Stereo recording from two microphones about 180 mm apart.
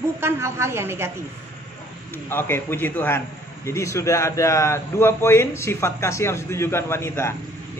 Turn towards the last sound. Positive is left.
turn(degrees=15)  # may be behind; listen again after turning